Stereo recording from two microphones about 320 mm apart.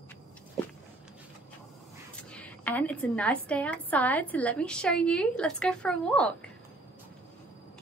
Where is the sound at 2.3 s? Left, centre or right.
Centre.